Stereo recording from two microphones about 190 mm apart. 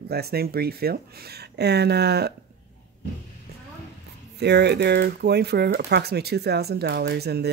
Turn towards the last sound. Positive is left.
turn(degrees=-60)  # may be behind; listen again after turning